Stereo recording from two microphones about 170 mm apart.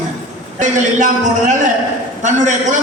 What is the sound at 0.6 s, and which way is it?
Speech, 45° right (ahead or behind).